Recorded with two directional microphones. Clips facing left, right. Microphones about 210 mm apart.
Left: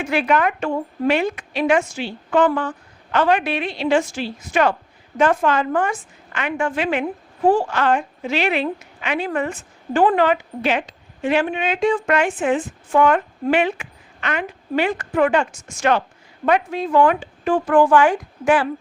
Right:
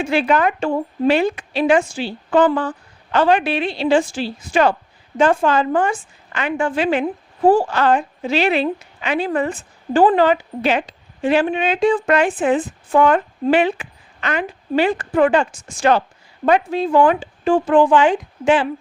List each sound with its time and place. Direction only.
0.0 s a woman's voice: 30° right (ahead or behind)